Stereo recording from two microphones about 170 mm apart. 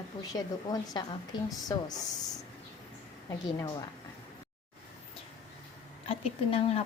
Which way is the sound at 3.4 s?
25° left (ahead or behind).